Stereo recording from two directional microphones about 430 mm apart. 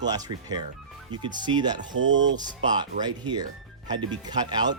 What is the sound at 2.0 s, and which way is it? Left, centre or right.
Speech, right.